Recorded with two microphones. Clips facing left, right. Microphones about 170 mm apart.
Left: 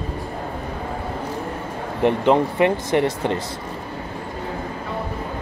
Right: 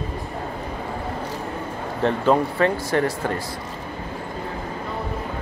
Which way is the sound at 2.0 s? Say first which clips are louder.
Left 2 dB; 15° left (ahead or behind).